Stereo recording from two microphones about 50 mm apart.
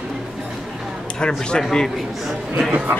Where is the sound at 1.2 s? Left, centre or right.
Centre.